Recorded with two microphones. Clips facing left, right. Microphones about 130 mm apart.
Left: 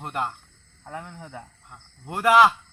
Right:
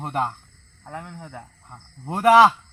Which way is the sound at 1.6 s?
30° right (ahead or behind).